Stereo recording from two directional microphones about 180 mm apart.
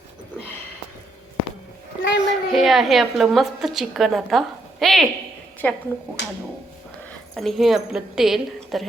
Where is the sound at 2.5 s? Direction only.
Centre (ahead or behind).